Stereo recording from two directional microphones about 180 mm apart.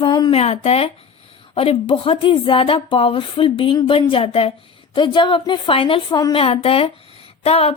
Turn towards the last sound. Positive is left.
turn(degrees=35)  # may be behind; listen again after turning